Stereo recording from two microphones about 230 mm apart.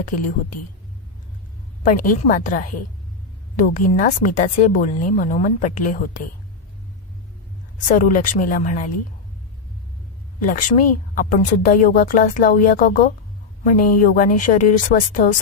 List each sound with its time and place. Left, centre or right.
1.9 s speech: left
7.9 s speech: left
10.4 s speech: left